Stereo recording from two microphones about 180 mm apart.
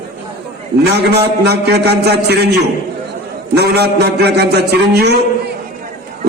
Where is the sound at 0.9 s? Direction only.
65° right (ahead or behind).